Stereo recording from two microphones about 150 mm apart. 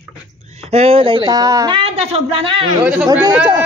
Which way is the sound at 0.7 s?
40° right (ahead or behind).